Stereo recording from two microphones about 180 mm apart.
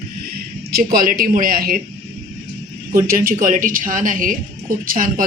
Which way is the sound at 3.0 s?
55° right (ahead or behind).